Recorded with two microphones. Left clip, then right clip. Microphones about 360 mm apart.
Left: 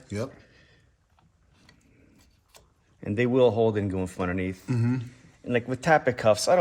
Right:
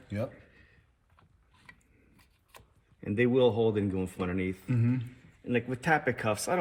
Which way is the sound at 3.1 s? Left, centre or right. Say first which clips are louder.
Left 4 dB; left.